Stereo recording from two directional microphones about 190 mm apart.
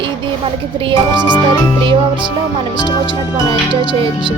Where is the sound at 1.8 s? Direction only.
25° right (ahead or behind).